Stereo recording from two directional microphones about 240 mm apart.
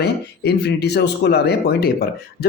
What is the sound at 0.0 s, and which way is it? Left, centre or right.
A man's voice, left.